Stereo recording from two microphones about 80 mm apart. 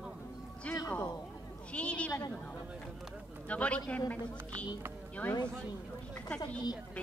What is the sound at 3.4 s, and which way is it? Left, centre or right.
Speech, centre.